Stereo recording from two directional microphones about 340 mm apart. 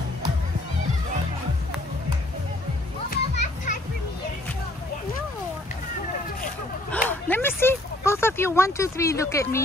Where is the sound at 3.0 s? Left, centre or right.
Left.